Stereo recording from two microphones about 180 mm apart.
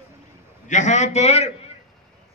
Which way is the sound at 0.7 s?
40° left (ahead or behind).